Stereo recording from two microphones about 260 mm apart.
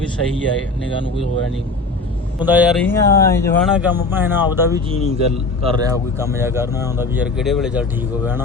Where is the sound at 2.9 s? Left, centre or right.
Centre.